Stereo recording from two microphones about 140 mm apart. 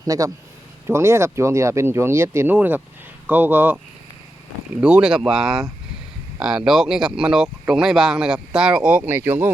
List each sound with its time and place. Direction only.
0.0 s a man's voice: 25° right (ahead or behind)